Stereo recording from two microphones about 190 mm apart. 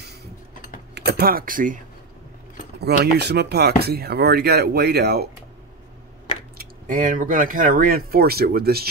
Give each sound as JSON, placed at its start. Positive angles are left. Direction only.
{"t": 0.9, "sound": "speech", "side_deg": -55}
{"t": 2.8, "sound": "speech", "side_deg": -60}
{"t": 6.6, "sound": "speech", "side_deg": -45}